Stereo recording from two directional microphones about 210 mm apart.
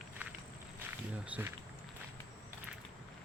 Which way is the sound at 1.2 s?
5° right (ahead or behind).